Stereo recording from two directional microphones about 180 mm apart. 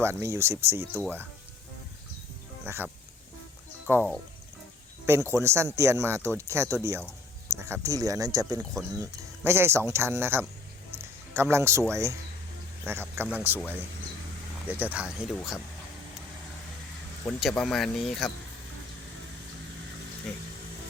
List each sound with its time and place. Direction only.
0.0 s speech: 15° right (ahead or behind)
2.6 s speech: 15° right (ahead or behind)
17.2 s speech: 5° left (ahead or behind)